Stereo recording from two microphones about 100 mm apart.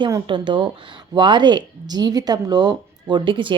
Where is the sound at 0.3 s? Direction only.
55° right (ahead or behind).